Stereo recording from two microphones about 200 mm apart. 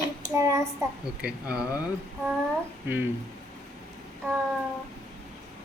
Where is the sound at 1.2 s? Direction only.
5° right (ahead or behind).